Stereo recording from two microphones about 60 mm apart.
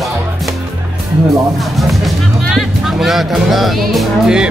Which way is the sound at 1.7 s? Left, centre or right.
Centre.